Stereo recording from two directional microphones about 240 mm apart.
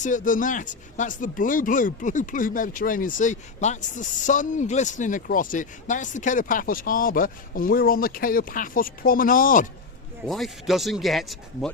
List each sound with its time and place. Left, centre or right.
0.0 s speech: left
10.2 s speech: centre